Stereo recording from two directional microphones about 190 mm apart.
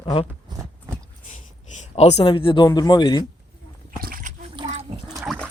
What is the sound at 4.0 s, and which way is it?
Dog, 50° right (ahead or behind).